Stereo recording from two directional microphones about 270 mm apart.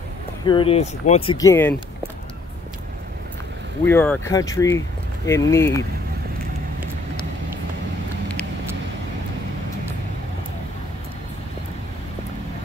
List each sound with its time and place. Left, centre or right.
0.5 s speech: centre
3.8 s speech: centre